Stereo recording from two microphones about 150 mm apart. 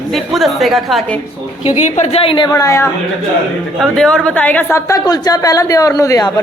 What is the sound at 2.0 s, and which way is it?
Speech, 40° left (ahead or behind).